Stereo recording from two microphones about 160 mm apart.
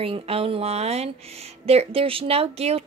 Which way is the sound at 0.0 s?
35° right (ahead or behind).